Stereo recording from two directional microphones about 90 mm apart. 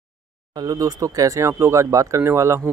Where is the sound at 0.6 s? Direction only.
40° right (ahead or behind).